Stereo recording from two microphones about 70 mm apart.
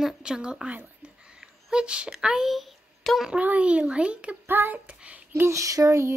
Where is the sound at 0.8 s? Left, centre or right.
Centre.